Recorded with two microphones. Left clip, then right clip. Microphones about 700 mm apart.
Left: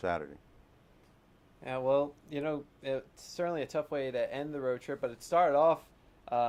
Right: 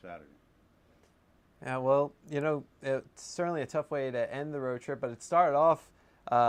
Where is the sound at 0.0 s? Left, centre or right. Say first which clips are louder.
Left 13 dB; left.